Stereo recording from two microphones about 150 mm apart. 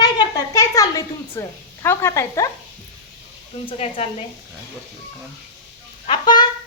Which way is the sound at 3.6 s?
40° left (ahead or behind).